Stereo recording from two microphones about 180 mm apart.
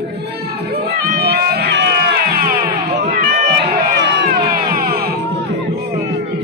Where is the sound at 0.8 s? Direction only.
60° right (ahead or behind).